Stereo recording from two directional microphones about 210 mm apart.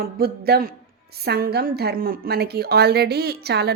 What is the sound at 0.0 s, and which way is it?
A woman's voice, 50° right (ahead or behind).